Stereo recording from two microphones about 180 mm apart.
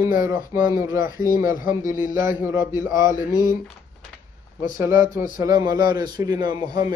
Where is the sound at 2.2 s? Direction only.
15° right (ahead or behind).